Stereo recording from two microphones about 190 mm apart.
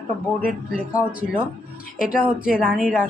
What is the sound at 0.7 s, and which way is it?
Speech, 5° right (ahead or behind).